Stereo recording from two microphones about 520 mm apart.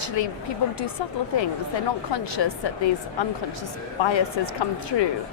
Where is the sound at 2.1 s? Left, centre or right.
Left.